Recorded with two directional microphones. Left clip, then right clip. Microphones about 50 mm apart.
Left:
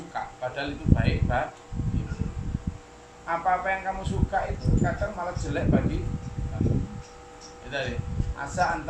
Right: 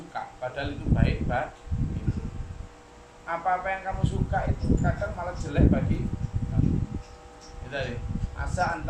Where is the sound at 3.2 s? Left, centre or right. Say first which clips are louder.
Left 2 dB; centre.